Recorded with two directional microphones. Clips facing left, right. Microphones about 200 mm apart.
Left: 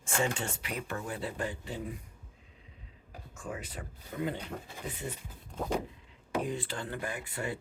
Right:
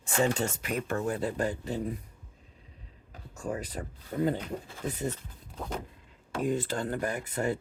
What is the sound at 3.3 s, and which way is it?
Speech, 40° right (ahead or behind).